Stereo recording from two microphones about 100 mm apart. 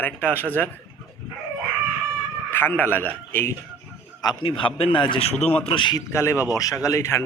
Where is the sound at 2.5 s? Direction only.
20° left (ahead or behind).